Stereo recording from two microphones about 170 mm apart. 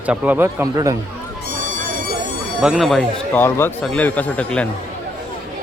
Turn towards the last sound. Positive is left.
turn(degrees=10)  # may be behind; listen again after turning